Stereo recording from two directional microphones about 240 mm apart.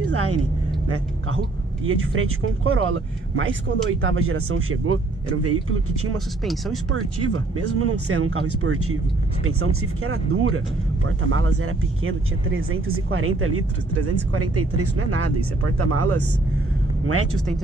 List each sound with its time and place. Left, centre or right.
0.1 s speech: right
6.4 s speech: centre
6.9 s a woman's voice: right